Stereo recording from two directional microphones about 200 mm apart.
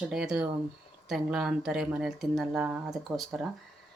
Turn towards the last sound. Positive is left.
turn(degrees=0)  # may be behind; listen again after turning